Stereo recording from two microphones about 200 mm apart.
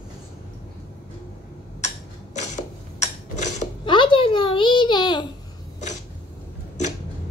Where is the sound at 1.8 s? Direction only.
35° left (ahead or behind).